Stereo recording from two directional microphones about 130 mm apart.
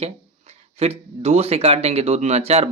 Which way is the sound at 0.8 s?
50° right (ahead or behind).